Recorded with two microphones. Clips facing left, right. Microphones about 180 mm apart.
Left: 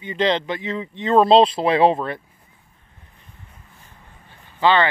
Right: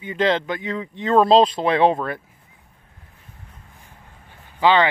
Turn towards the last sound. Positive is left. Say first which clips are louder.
# right 1 dB
turn(degrees=-15)  # may be behind; listen again after turning